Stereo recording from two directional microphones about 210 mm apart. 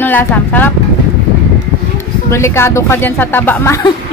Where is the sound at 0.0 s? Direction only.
10° left (ahead or behind).